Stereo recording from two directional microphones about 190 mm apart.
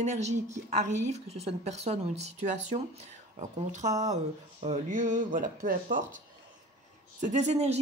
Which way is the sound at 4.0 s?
35° right (ahead or behind).